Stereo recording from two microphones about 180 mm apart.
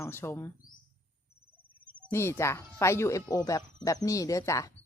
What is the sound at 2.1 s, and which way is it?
Speech, 15° left (ahead or behind).